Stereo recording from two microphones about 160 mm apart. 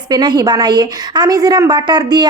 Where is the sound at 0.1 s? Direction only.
25° right (ahead or behind).